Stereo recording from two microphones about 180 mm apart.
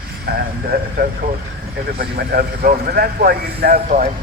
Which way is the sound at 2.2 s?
55° right (ahead or behind).